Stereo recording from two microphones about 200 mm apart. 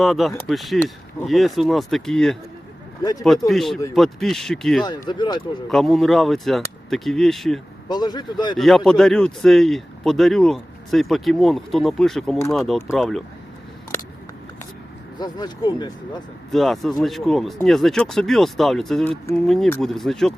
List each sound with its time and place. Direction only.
0.0 s speech: centre (ahead or behind)
3.0 s speech: 20° left (ahead or behind)
3.2 s speech: centre (ahead or behind)
4.8 s speech: 20° left (ahead or behind)
5.6 s speech: centre (ahead or behind)
7.9 s speech: 20° left (ahead or behind)
8.5 s speech: centre (ahead or behind)
15.2 s speech: 20° left (ahead or behind)
16.5 s speech: centre (ahead or behind)